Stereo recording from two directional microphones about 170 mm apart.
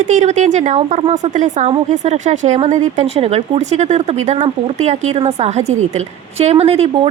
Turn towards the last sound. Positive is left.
turn(degrees=-35)  # may be behind; listen again after turning